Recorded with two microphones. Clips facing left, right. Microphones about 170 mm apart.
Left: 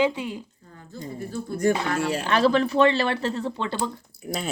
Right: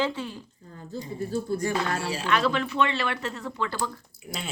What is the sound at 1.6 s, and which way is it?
Speech, 50° left (ahead or behind).